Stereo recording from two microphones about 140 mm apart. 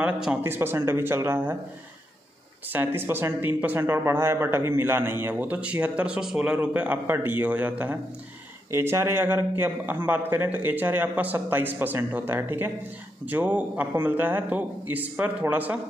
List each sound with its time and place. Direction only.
0.0 s speech: 10° right (ahead or behind)
2.7 s speech: 15° right (ahead or behind)